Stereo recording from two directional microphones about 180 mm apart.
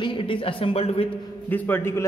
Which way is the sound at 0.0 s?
30° left (ahead or behind).